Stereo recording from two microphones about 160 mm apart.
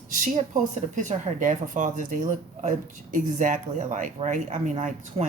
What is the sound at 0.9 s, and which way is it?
Speech, 55° right (ahead or behind).